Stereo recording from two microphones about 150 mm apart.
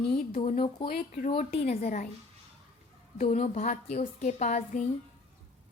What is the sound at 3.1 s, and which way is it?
A woman's voice, 45° left (ahead or behind).